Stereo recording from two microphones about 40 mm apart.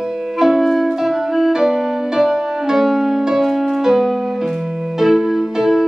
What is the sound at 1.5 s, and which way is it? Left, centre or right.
Music, centre.